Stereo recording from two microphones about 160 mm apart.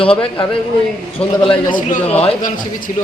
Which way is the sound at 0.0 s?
35° left (ahead or behind).